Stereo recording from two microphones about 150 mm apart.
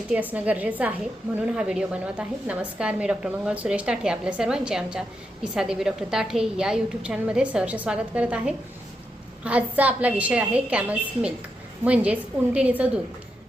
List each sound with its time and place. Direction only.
0.1 s a woman's voice: 10° right (ahead or behind)